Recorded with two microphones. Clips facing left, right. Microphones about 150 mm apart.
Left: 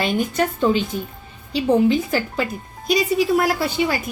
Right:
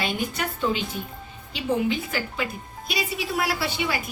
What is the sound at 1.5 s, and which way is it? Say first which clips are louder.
A woman's voice: left 8 dB; 35° left (ahead or behind).